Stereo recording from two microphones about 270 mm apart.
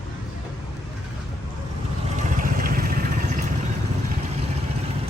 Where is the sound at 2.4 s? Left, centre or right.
Right.